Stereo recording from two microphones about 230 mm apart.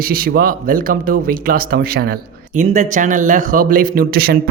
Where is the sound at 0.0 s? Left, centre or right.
Right.